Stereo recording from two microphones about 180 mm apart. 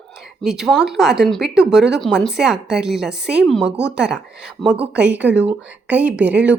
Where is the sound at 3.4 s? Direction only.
Centre (ahead or behind).